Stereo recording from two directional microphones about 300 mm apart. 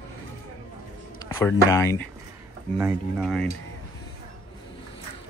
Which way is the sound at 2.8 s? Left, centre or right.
Centre.